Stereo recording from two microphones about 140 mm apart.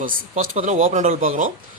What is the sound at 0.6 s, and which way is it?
Speech, 60° right (ahead or behind).